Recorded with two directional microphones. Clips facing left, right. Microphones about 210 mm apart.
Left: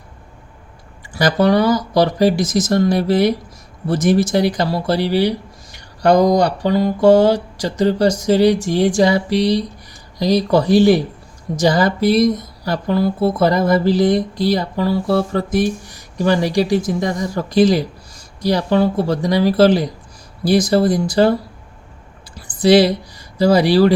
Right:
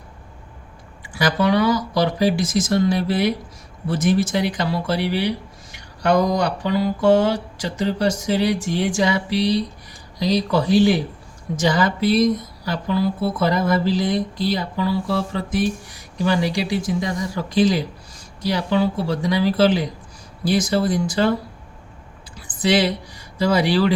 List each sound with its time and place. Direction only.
1.1 s speech: 40° left (ahead or behind)
22.4 s speech: 35° left (ahead or behind)